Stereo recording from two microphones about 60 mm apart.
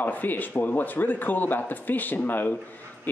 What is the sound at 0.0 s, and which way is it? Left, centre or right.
A man's voice, left.